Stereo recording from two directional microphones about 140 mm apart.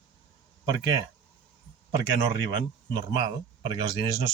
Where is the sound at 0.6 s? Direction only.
25° right (ahead or behind).